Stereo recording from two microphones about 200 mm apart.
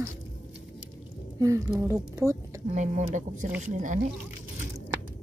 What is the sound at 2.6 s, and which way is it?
Speech, 35° right (ahead or behind).